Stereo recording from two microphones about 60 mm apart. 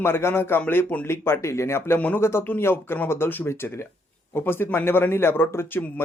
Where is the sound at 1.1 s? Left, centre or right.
Left.